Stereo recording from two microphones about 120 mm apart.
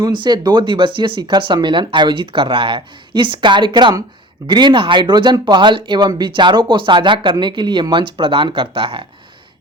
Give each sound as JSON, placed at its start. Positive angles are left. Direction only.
{"t": 0.0, "sound": "speech", "side_deg": -40}